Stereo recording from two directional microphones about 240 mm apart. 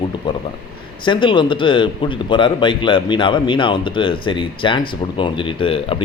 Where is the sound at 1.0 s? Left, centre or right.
Centre.